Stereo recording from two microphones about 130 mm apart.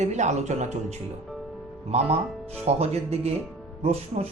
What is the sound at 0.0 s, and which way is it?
A man's voice, 65° right (ahead or behind).